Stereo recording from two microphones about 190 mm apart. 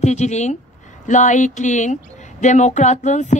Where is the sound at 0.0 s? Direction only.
35° left (ahead or behind).